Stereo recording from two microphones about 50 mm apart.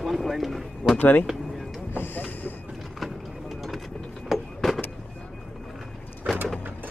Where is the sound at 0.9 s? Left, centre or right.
Left.